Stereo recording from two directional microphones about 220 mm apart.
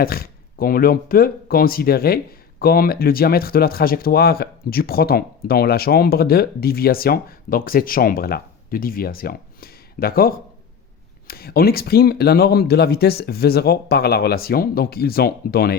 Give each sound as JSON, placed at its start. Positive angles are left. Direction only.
{"t": 0.0, "sound": "speech", "side_deg": 45}